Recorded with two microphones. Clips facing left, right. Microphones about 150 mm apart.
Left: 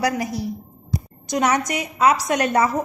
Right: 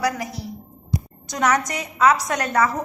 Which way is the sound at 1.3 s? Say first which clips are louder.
Left 1 dB; 25° left (ahead or behind).